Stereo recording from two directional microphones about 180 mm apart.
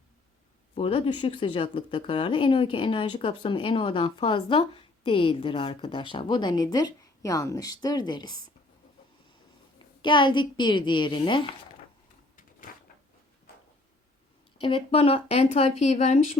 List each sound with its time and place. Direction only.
0.8 s speech: 30° left (ahead or behind)
9.7 s speech: 25° left (ahead or behind)
12.4 s a sound: 50° left (ahead or behind)
14.6 s speech: 30° left (ahead or behind)